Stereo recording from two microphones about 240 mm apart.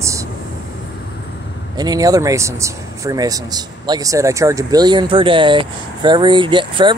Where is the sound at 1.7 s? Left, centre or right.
Centre.